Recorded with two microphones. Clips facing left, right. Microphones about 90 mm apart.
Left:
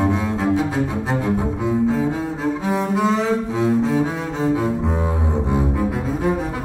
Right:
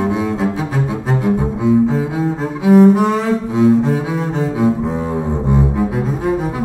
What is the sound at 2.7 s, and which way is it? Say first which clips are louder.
Cello: right 15 dB; 15° right (ahead or behind).